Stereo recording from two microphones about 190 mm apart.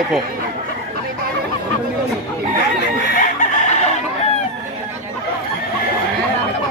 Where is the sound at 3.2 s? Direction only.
40° left (ahead or behind).